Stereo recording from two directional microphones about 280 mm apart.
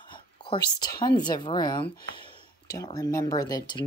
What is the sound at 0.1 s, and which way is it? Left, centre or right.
Speech, centre.